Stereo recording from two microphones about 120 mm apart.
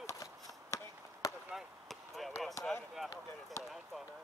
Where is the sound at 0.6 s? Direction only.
25° left (ahead or behind).